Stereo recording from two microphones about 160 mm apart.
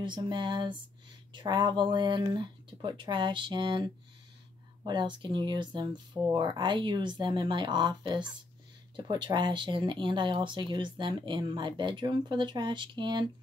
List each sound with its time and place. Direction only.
0.0 s speech: 30° right (ahead or behind)